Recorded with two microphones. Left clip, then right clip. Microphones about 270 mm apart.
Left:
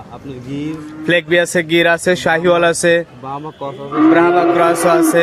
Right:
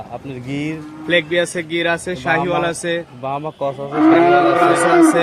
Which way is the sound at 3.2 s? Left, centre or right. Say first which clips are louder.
Right 3 dB; right.